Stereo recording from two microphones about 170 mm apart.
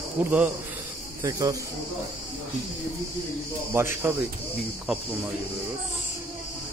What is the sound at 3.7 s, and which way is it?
Speech, 15° right (ahead or behind).